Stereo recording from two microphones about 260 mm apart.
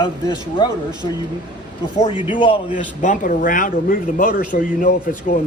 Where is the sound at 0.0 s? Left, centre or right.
Centre.